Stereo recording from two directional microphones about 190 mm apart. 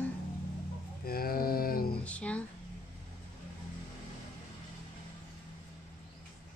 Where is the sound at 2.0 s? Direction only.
5° left (ahead or behind).